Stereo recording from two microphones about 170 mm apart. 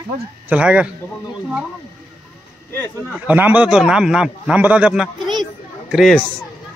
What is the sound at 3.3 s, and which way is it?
A man's voice, 10° right (ahead or behind).